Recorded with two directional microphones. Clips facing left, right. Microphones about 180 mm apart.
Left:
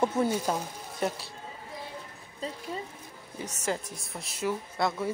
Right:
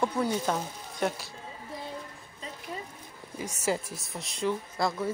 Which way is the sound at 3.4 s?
10° right (ahead or behind).